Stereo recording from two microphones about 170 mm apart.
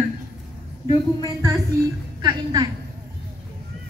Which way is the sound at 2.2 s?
25° right (ahead or behind).